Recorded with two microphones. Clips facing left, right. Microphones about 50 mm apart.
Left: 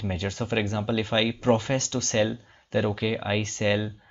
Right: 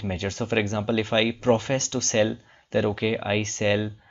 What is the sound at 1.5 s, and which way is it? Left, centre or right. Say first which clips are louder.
Speech: even; centre.